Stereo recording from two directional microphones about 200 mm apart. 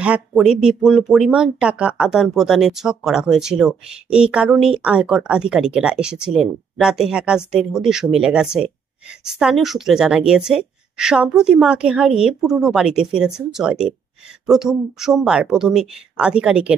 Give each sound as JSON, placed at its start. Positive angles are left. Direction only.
{"t": 0.0, "sound": "speech", "side_deg": -5}